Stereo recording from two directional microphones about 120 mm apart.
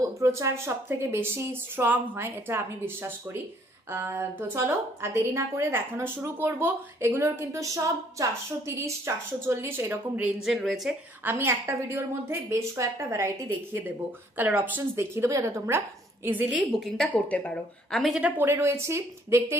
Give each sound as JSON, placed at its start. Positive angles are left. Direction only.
{"t": 0.0, "sound": "a woman's voice", "side_deg": -25}
{"t": 10.4, "sound": "speech", "side_deg": 0}
{"t": 11.2, "sound": "a woman's voice", "side_deg": -20}
{"t": 14.3, "sound": "a woman's voice", "side_deg": -15}
{"t": 17.1, "sound": "speech", "side_deg": 15}
{"t": 18.1, "sound": "a woman's voice", "side_deg": -10}